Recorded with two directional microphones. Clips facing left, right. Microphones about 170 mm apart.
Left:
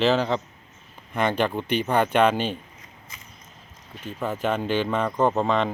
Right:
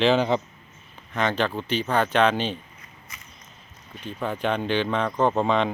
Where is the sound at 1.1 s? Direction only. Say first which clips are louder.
Left 1 dB; 10° left (ahead or behind).